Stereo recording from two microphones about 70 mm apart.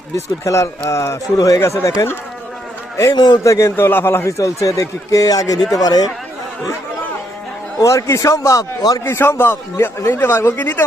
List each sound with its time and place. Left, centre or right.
0.4 s a man's voice: left
3.2 s speech: left
3.4 s a man's voice: left
7.8 s a man's voice: left
9.0 s speech: left
9.7 s speech: left